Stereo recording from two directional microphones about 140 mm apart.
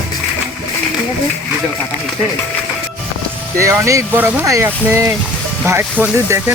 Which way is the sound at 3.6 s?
20° right (ahead or behind).